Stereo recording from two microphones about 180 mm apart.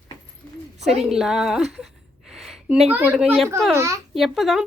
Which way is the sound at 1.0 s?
Centre (ahead or behind).